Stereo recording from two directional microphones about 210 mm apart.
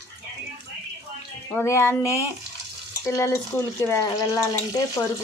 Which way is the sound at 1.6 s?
10° left (ahead or behind).